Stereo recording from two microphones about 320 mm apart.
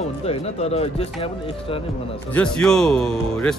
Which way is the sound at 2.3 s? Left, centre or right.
Centre.